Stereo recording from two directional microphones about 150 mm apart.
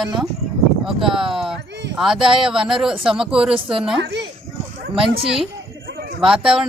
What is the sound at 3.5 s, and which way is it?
Speech, 35° right (ahead or behind).